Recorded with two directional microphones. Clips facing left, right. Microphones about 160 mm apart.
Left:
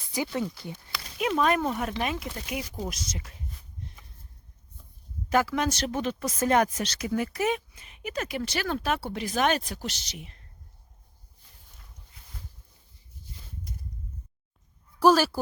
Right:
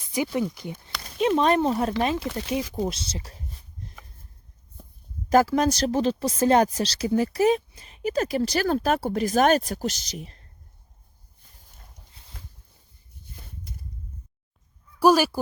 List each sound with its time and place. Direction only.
0.0 s speech: 20° right (ahead or behind)
1.3 s speech: 30° right (ahead or behind)
2.7 s a sound: 30° right (ahead or behind)
5.3 s speech: 40° right (ahead or behind)
14.9 s speech: 10° right (ahead or behind)